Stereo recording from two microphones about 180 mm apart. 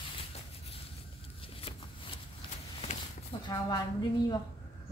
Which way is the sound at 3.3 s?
30° left (ahead or behind).